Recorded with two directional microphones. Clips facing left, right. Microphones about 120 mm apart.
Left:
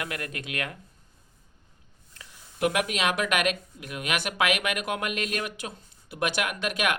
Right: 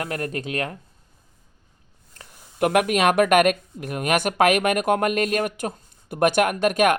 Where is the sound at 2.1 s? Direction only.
50° right (ahead or behind).